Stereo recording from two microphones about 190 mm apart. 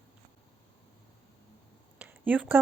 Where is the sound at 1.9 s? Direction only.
10° right (ahead or behind).